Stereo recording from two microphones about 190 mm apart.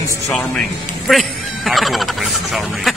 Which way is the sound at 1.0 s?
Centre (ahead or behind).